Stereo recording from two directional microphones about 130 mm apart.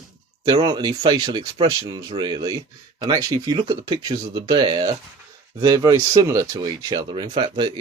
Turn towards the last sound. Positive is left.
turn(degrees=-35)  # may be behind; listen again after turning